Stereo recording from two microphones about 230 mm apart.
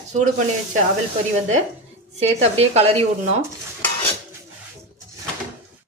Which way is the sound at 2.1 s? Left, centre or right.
Right.